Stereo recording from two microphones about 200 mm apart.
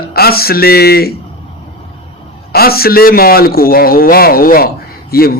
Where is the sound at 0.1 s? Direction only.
50° left (ahead or behind).